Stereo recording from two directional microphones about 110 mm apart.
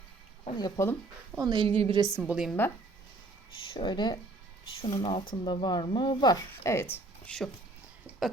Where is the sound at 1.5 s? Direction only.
50° right (ahead or behind).